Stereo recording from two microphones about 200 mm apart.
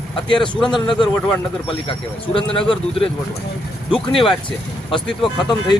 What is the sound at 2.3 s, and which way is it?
Speech, 25° left (ahead or behind).